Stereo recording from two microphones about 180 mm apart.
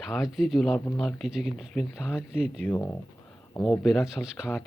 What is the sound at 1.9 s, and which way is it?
Speech, 15° left (ahead or behind).